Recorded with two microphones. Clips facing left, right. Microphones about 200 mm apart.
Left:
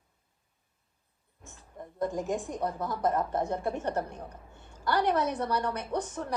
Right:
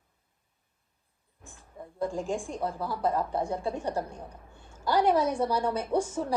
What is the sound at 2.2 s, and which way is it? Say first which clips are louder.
A woman's voice: even; 10° right (ahead or behind).